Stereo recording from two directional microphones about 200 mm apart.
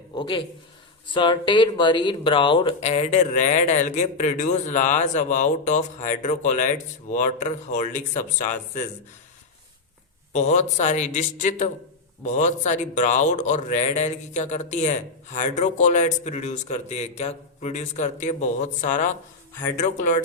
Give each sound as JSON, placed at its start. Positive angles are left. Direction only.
{"t": 0.1, "sound": "speech", "side_deg": 20}
{"t": 10.3, "sound": "speech", "side_deg": 35}